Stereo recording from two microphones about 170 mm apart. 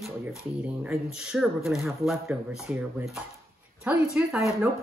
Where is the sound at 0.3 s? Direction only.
5° right (ahead or behind).